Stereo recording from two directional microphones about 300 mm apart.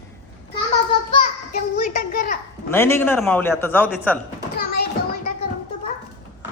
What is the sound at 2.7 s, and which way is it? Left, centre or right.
A woman's voice, centre.